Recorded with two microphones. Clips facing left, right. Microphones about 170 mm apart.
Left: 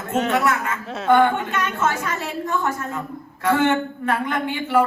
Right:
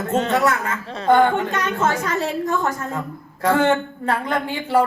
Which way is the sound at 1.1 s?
35° right (ahead or behind).